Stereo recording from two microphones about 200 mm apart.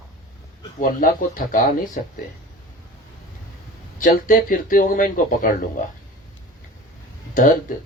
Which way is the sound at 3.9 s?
45° left (ahead or behind).